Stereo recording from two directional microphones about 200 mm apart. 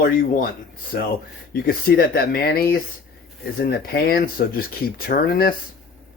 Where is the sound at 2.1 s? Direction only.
50° left (ahead or behind).